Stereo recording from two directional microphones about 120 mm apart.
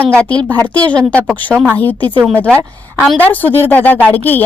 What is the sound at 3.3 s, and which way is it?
Speech, 15° left (ahead or behind).